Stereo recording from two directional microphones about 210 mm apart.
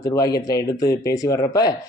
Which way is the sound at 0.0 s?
15° left (ahead or behind).